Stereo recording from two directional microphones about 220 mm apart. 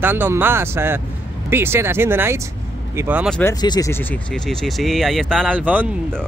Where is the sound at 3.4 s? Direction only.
15° left (ahead or behind).